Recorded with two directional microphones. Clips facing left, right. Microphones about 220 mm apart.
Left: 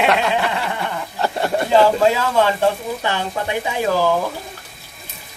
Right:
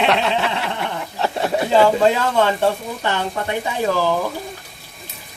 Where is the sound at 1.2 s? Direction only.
Centre (ahead or behind).